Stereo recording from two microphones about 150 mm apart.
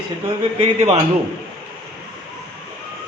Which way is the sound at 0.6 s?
45° right (ahead or behind).